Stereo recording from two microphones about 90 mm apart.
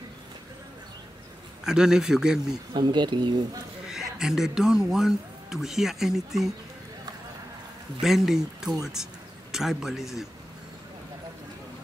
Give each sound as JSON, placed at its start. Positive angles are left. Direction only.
{"t": 1.6, "sound": "a man's voice", "side_deg": -5}
{"t": 2.7, "sound": "speech", "side_deg": -55}
{"t": 3.8, "sound": "speech", "side_deg": -5}
{"t": 8.0, "sound": "speech", "side_deg": -5}